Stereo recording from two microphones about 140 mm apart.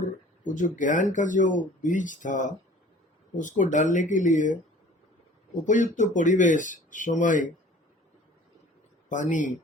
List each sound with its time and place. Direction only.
0.0 s speech: 65° left (ahead or behind)
5.6 s speech: 65° left (ahead or behind)
9.0 s speech: 65° left (ahead or behind)